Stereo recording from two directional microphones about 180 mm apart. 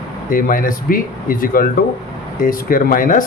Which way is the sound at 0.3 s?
50° left (ahead or behind).